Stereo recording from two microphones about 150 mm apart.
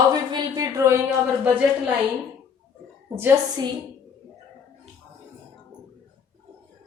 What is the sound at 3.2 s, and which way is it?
Speech, 25° right (ahead or behind).